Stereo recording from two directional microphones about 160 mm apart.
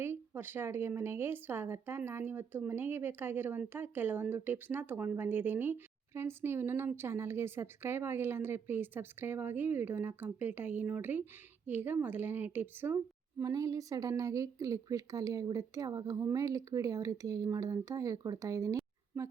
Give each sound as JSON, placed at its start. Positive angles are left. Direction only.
{"t": 0.0, "sound": "a woman's voice", "side_deg": -15}